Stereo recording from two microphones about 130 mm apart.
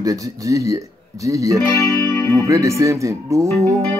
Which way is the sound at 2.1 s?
20° left (ahead or behind).